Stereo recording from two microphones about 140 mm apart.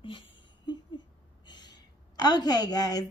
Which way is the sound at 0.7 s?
30° left (ahead or behind).